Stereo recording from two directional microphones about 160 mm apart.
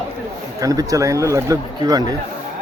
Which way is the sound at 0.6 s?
20° right (ahead or behind).